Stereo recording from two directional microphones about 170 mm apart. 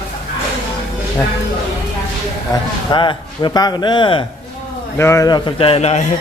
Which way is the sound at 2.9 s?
30° left (ahead or behind).